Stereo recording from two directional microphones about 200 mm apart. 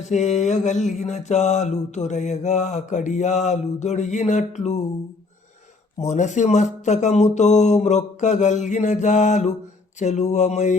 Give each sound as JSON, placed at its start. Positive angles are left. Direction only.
{"t": 0.0, "sound": "mantra", "side_deg": 35}
{"t": 6.0, "sound": "mantra", "side_deg": 35}